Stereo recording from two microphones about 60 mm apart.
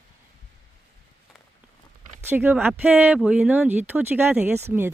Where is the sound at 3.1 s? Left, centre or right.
Centre.